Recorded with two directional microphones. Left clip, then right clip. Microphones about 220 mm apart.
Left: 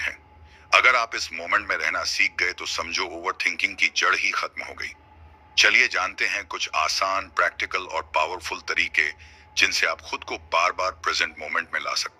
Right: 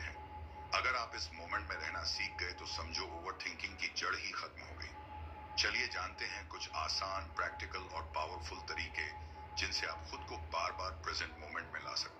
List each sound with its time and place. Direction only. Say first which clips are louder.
0.7 s a man's voice: left 18 dB; 50° left (ahead or behind)
9.6 s speech: left 18 dB; 55° left (ahead or behind)